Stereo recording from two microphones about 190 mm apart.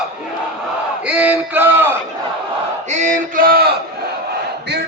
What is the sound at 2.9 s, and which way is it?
Chant, 40° right (ahead or behind).